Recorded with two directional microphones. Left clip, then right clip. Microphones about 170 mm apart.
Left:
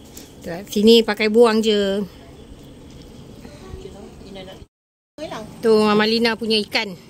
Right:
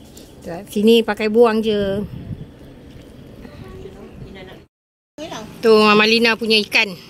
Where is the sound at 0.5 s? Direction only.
5° left (ahead or behind).